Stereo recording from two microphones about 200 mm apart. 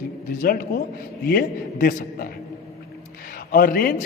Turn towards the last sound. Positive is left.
turn(degrees=50)  # may be behind; listen again after turning